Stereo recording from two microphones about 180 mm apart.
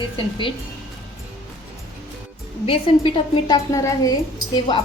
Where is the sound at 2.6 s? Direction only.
30° left (ahead or behind).